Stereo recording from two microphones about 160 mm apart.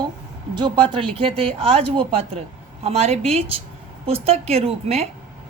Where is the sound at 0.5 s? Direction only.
30° right (ahead or behind).